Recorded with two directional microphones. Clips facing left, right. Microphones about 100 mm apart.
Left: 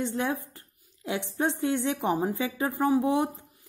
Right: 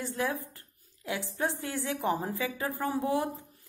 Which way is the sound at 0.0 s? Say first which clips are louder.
Left 3 dB; 20° left (ahead or behind).